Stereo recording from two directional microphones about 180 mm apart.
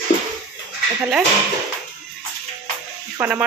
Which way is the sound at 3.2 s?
5° right (ahead or behind).